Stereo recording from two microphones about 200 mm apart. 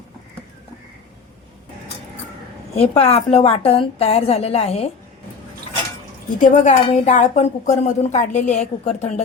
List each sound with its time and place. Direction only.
2.7 s a woman's voice: 30° left (ahead or behind)
6.4 s speech: 35° left (ahead or behind)